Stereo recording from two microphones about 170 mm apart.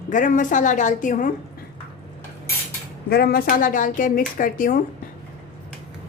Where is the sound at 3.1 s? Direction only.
65° left (ahead or behind).